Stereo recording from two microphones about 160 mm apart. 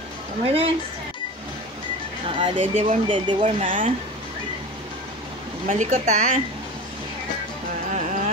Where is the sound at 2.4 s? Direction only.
40° right (ahead or behind).